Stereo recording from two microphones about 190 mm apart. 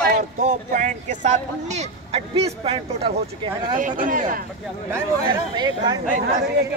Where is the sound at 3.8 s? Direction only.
45° right (ahead or behind).